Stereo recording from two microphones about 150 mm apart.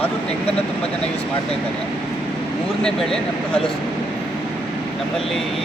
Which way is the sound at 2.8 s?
5° left (ahead or behind).